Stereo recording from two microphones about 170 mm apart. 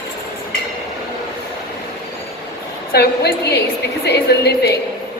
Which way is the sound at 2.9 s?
70° left (ahead or behind).